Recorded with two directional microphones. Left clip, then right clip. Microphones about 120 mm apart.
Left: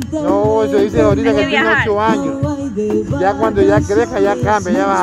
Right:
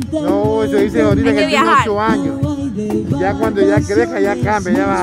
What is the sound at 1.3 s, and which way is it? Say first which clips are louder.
Speech: right 1 dB; 40° right (ahead or behind).